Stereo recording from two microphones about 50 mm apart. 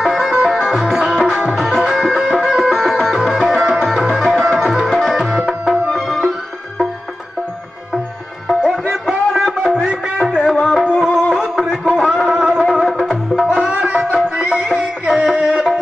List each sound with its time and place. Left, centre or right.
0.0 s music: centre
8.6 s music: centre
9.8 s music: centre
11.0 s music: centre
11.4 s a sound: centre
13.0 s music: centre
13.8 s music: right